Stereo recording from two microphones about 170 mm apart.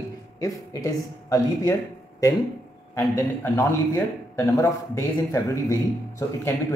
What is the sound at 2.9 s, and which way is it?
A man's voice, 15° left (ahead or behind).